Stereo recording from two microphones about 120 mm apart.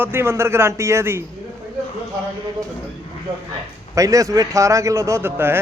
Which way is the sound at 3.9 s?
25° right (ahead or behind).